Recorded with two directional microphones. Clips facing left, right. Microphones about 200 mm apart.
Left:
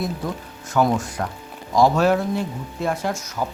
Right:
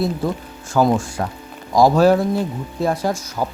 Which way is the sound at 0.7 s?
30° right (ahead or behind).